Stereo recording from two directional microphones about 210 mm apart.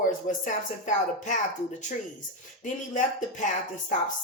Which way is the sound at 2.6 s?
35° left (ahead or behind).